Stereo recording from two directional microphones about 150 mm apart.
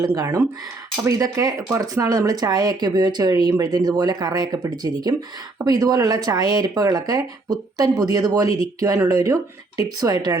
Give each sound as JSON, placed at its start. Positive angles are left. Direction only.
{"t": 0.0, "sound": "speech", "side_deg": -20}